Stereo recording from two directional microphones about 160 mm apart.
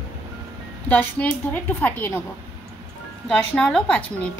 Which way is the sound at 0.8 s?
10° left (ahead or behind).